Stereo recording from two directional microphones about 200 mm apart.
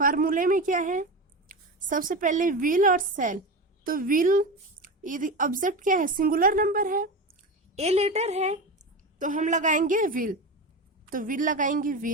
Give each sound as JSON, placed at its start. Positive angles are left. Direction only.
{"t": 0.0, "sound": "a woman's voice", "side_deg": -45}
{"t": 7.8, "sound": "a woman's voice", "side_deg": -30}